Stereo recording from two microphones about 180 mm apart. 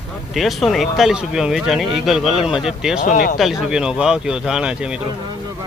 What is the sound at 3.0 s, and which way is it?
Speech, 55° left (ahead or behind).